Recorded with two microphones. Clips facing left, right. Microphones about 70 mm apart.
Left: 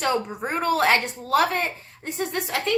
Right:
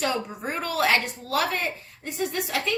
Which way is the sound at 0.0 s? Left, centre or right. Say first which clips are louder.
Left 3 dB; left.